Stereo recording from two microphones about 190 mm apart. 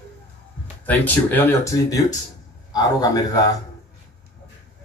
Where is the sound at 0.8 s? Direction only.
10° left (ahead or behind).